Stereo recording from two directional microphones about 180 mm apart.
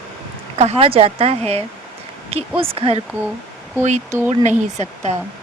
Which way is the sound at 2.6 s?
30° right (ahead or behind).